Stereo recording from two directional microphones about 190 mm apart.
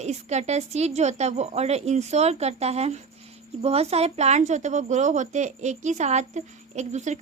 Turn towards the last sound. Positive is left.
turn(degrees=-40)  # may be behind; listen again after turning